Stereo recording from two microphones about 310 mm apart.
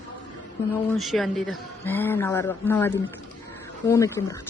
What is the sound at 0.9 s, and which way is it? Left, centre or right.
Speech, centre.